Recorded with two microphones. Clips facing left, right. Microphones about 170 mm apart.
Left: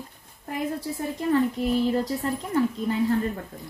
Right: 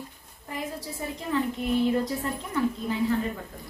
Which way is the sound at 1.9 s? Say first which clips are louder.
Left 2 dB; 35° left (ahead or behind).